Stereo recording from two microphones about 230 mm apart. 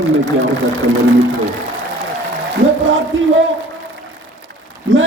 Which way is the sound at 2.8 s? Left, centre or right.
Right.